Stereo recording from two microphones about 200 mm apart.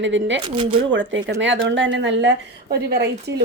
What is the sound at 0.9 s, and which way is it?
Speech, 65° right (ahead or behind).